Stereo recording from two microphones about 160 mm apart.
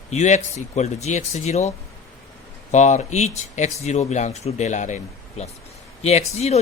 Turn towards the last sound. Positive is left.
turn(degrees=40)  # may be behind; listen again after turning